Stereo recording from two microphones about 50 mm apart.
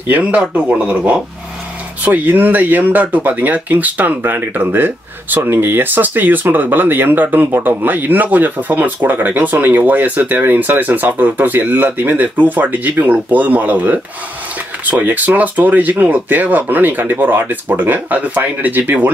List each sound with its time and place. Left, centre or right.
0.1 s speech: right